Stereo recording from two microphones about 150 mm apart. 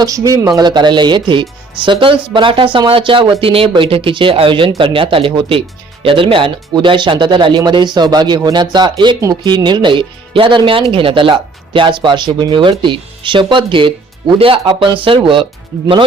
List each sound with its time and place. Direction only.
0.0 s speech: 25° right (ahead or behind)